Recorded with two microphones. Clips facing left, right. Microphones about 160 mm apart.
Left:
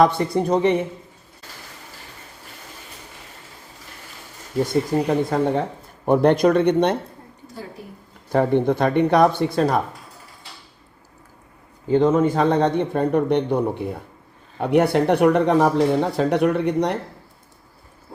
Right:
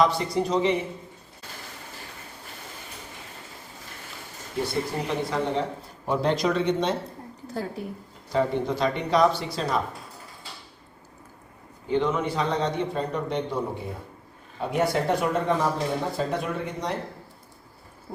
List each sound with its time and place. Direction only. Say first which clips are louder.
0.0 s a man's voice: left 5 dB; 55° left (ahead or behind)
4.6 s a man's voice: left 8 dB; 45° left (ahead or behind); by 6.9 s 60° left (ahead or behind)
8.3 s a man's voice: left 6 dB; 55° left (ahead or behind)
11.9 s a man's voice: left 8 dB; 40° left (ahead or behind); by 17.0 s 65° left (ahead or behind)